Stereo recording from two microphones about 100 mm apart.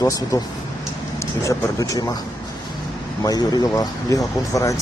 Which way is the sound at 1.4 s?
30° left (ahead or behind).